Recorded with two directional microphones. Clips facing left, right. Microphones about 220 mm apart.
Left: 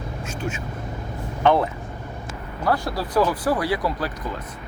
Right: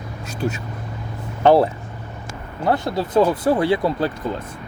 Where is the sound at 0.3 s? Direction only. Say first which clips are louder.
Right 6 dB; 40° right (ahead or behind).